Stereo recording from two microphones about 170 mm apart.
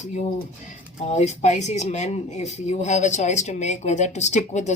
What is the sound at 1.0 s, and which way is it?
Speech, 40° left (ahead or behind).